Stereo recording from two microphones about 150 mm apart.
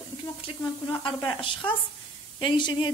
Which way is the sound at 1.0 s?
35° left (ahead or behind).